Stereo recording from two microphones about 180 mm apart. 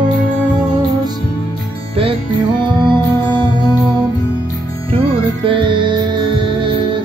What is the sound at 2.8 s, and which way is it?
Music, 25° right (ahead or behind).